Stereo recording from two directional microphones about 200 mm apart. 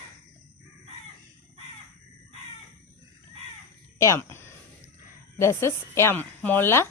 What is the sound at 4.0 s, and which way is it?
Speech, 15° left (ahead or behind).